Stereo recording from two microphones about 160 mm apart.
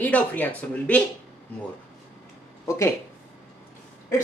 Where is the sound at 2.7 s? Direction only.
20° left (ahead or behind).